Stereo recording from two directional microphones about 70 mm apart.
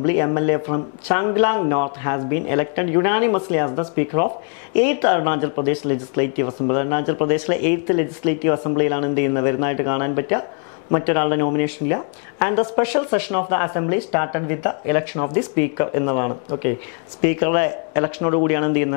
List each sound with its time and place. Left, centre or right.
0.0 s speech: left